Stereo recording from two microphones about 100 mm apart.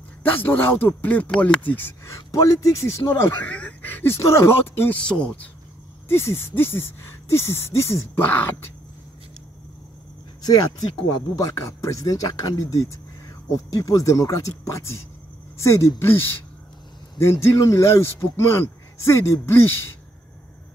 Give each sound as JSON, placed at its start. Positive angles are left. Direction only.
{"t": 0.2, "sound": "a man's voice", "side_deg": 20}
{"t": 2.1, "sound": "a man's voice", "side_deg": 30}
{"t": 3.4, "sound": "speech", "side_deg": 15}
{"t": 6.1, "sound": "a man's voice", "side_deg": 25}
{"t": 10.4, "sound": "a man's voice", "side_deg": 40}